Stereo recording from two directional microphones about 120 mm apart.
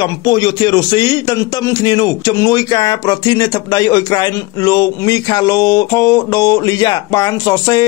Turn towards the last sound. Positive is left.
turn(degrees=30)  # may be behind; listen again after turning